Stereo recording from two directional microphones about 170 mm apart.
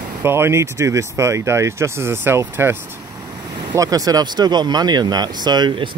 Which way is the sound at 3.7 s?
20° right (ahead or behind).